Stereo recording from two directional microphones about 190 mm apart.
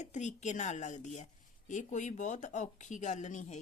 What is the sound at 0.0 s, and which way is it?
A woman's voice, 40° left (ahead or behind).